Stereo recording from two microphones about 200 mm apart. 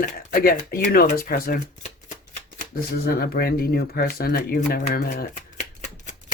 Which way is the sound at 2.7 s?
50° left (ahead or behind).